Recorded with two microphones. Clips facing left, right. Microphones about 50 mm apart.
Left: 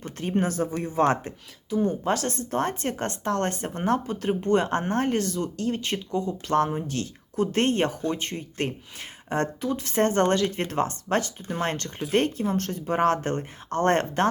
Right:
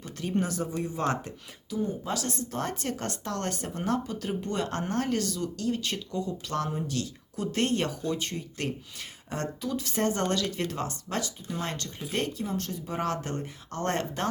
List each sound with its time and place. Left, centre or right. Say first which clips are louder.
0.0 s speech: left 4 dB; left
1.8 s speech: left 7 dB; left
2.1 s speech: left 5 dB; left